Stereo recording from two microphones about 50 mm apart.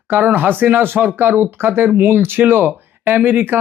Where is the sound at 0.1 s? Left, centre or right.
Right.